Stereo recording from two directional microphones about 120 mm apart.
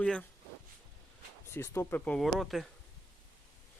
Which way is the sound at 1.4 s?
20° left (ahead or behind).